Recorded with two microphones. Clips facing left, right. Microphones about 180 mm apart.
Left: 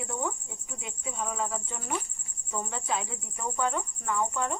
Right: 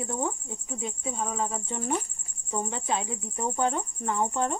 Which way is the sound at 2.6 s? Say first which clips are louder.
Right 1 dB; 25° right (ahead or behind).